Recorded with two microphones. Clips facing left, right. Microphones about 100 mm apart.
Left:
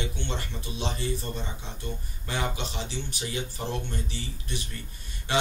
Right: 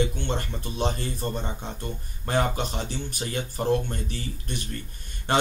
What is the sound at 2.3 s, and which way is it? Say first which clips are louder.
Speech: right 6 dB; 50° right (ahead or behind).